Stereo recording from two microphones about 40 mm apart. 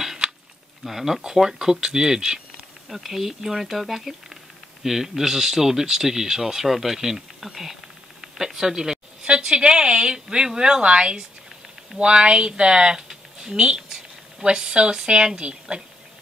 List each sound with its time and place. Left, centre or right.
0.8 s speech: centre; by 15.8 s right